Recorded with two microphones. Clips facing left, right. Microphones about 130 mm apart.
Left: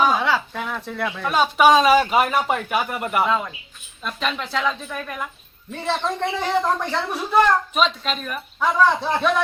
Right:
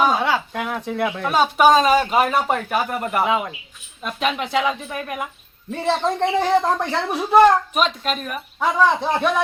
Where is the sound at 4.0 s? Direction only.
10° right (ahead or behind).